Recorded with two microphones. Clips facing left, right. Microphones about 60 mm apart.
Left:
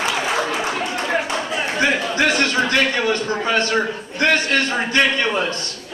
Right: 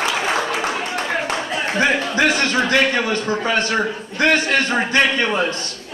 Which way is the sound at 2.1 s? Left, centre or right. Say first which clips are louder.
Right 1 dB; centre.